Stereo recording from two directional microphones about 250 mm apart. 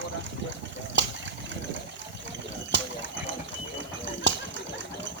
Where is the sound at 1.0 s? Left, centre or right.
Right.